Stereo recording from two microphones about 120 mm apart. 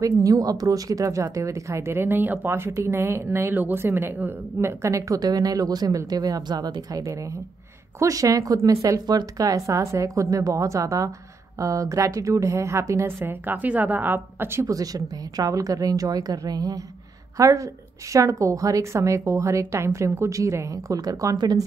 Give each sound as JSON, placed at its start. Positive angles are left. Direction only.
{"t": 0.0, "sound": "a woman's voice", "side_deg": -30}